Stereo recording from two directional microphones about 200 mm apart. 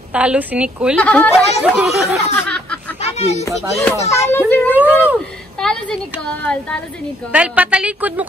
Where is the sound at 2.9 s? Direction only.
30° left (ahead or behind).